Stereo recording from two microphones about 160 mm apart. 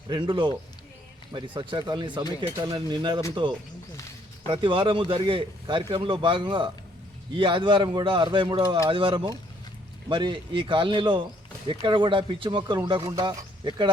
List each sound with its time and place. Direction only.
0.1 s speech: 30° right (ahead or behind)
4.4 s a man's voice: 30° right (ahead or behind)